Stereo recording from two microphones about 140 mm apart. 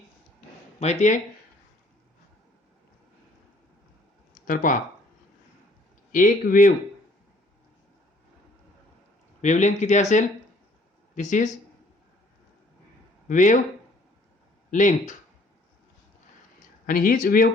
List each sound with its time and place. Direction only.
0.8 s speech: 55° left (ahead or behind)
4.4 s speech: 75° left (ahead or behind)
6.1 s speech: 75° left (ahead or behind)
9.4 s speech: 60° left (ahead or behind)
13.2 s speech: 65° left (ahead or behind)
14.7 s speech: 65° left (ahead or behind)
16.8 s speech: 80° left